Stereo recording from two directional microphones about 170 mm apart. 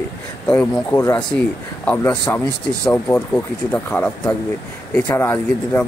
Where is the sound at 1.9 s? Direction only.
10° left (ahead or behind).